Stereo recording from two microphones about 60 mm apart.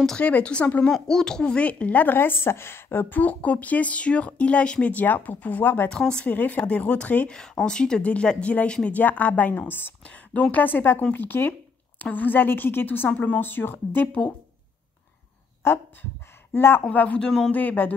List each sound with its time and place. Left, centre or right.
0.2 s speech: centre
0.8 s speech: centre; by 5.9 s left
5.9 s speech: centre
6.2 s speech: left
7.3 s speech: centre
9.5 s a woman's voice: left
10.0 s a woman's voice: left
13.1 s speech: left
13.4 s a woman's voice: left
15.6 s a woman's voice: left
16.9 s speech: left